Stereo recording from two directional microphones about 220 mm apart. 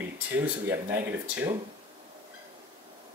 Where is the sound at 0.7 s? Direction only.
10° right (ahead or behind).